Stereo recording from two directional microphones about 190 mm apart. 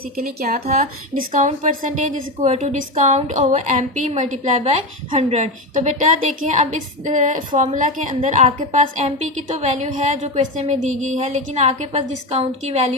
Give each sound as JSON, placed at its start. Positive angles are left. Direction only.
{"t": 0.2, "sound": "a woman's voice", "side_deg": -45}